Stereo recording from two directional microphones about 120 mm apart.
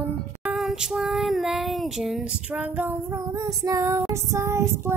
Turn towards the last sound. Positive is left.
turn(degrees=-20)  # may be behind; listen again after turning